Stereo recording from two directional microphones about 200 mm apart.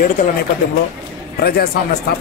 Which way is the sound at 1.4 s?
50° left (ahead or behind).